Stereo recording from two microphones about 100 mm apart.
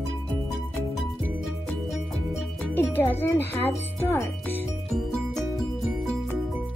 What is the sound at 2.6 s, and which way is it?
Music, 25° left (ahead or behind).